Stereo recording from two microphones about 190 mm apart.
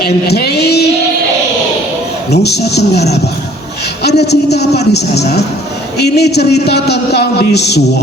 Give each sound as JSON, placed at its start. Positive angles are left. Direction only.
{"t": 0.0, "sound": "child singing", "side_deg": 60}
{"t": 2.4, "sound": "a man's voice", "side_deg": 60}